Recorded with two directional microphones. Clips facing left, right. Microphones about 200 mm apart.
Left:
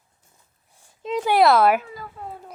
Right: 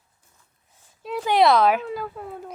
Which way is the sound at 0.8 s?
15° left (ahead or behind).